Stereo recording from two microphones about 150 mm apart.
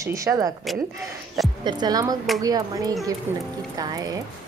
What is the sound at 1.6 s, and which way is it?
A woman's voice, 25° right (ahead or behind).